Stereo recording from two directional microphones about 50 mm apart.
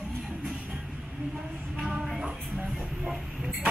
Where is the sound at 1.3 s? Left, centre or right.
Centre.